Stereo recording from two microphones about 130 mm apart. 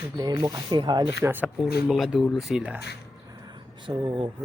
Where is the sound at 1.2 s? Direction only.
15° right (ahead or behind).